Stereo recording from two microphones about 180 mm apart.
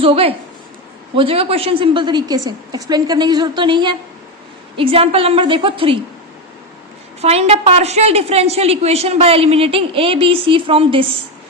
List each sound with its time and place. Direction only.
0.0 s a woman's voice: 30° right (ahead or behind)
7.2 s a woman's voice: 35° right (ahead or behind)